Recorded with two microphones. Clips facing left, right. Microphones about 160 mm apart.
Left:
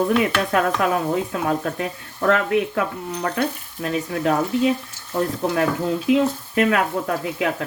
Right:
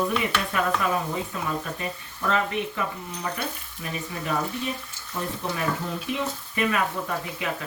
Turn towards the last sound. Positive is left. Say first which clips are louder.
# left 7 dB
turn(degrees=70)  # may be behind; listen again after turning